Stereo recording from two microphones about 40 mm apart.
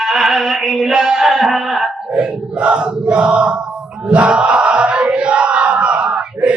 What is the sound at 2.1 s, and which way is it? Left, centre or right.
Crowd, right.